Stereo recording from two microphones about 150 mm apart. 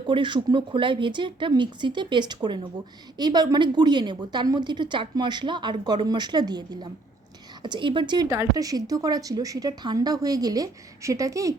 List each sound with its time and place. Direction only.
0.1 s a woman's voice: 35° right (ahead or behind)